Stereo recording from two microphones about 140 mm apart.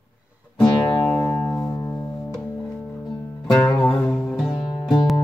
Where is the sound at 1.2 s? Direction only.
20° left (ahead or behind).